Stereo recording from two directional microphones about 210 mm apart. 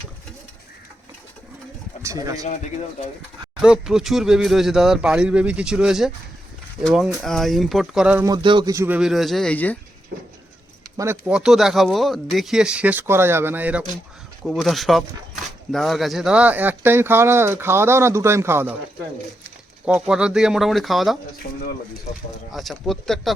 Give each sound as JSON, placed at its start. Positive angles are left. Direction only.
{"t": 2.0, "sound": "speech", "side_deg": -15}
{"t": 2.4, "sound": "speech", "side_deg": 35}
{"t": 3.6, "sound": "speech", "side_deg": -5}
{"t": 8.3, "sound": "speech", "side_deg": -20}
{"t": 10.9, "sound": "speech", "side_deg": -10}
{"t": 19.8, "sound": "speech", "side_deg": -5}
{"t": 21.5, "sound": "speech", "side_deg": 50}
{"t": 22.5, "sound": "speech", "side_deg": 0}